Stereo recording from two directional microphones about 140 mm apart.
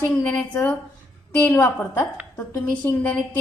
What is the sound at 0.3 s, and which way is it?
A woman's voice, 10° left (ahead or behind).